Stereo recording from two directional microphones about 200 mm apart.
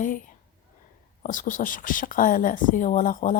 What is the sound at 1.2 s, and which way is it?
Speech, 40° left (ahead or behind).